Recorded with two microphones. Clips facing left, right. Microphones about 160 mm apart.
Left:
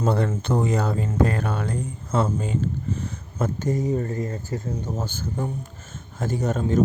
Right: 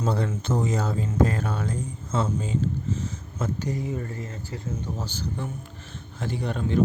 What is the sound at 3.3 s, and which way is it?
Speech, 45° left (ahead or behind).